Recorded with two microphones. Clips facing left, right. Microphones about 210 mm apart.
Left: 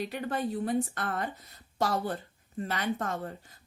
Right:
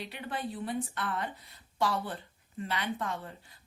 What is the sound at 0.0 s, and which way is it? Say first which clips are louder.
Speech: left 6 dB; 45° left (ahead or behind).